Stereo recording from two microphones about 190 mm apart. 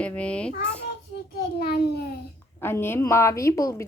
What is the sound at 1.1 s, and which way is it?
Speech, 55° left (ahead or behind).